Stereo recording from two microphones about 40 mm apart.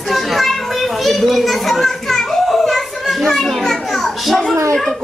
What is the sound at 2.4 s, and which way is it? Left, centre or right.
Children playing, centre.